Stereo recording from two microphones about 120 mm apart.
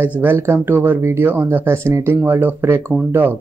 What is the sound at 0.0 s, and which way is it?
Speech, 15° right (ahead or behind).